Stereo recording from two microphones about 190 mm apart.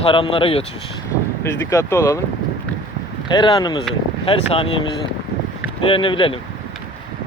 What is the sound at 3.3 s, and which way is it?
Speech, 25° left (ahead or behind).